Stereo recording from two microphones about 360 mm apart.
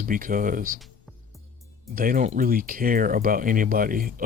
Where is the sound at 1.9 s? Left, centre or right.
Right.